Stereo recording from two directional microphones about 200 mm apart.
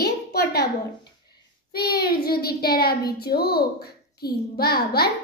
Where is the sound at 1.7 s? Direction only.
50° left (ahead or behind).